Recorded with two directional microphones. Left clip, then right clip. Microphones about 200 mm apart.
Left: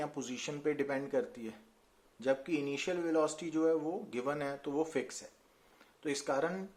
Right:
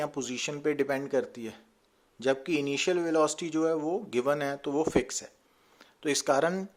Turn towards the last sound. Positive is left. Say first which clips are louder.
# right 8 dB
turn(degrees=-40)  # may be behind; listen again after turning